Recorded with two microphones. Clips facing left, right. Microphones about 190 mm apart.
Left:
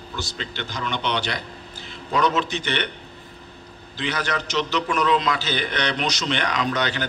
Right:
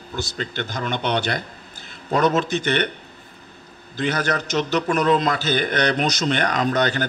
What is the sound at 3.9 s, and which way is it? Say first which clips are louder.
A man's voice: right 4 dB; 45° right (ahead or behind).